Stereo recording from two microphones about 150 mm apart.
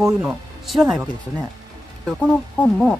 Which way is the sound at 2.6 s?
10° left (ahead or behind).